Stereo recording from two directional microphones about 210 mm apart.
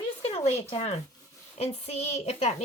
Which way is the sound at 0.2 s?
30° left (ahead or behind).